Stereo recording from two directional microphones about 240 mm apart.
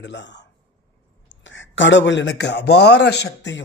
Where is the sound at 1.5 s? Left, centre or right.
Left.